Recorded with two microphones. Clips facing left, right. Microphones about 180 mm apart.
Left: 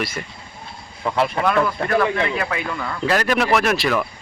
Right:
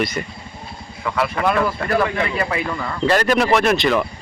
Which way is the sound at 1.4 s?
5° right (ahead or behind).